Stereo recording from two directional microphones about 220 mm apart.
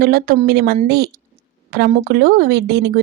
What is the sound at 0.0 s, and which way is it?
Speech, 45° right (ahead or behind).